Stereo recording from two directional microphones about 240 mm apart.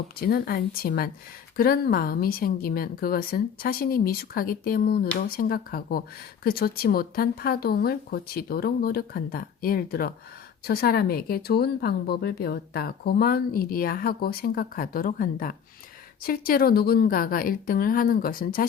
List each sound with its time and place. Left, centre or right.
0.2 s a woman's voice: left